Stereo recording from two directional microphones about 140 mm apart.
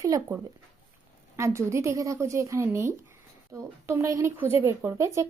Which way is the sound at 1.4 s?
20° right (ahead or behind).